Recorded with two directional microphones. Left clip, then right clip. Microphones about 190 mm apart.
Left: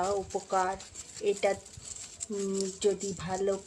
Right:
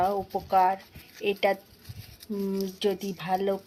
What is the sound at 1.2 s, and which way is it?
Speech, 15° right (ahead or behind).